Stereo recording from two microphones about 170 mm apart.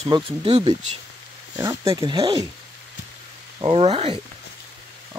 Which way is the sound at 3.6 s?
30° right (ahead or behind).